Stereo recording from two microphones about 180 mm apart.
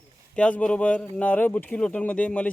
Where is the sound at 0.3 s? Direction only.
5° left (ahead or behind).